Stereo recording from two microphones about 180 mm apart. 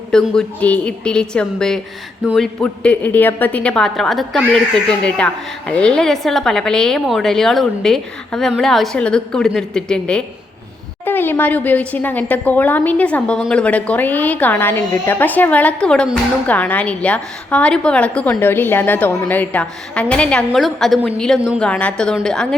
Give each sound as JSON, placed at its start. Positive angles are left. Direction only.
{"t": 0.1, "sound": "a woman's voice", "side_deg": 5}